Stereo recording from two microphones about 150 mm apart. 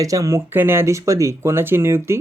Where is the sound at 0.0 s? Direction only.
20° right (ahead or behind).